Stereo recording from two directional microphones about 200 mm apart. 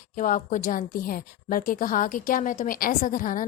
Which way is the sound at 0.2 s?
40° left (ahead or behind).